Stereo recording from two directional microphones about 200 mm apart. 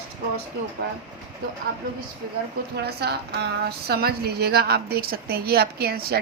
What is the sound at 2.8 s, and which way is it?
A woman's voice, 55° right (ahead or behind).